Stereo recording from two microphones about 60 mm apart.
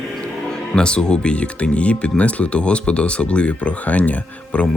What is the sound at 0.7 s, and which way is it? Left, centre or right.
Speech, centre.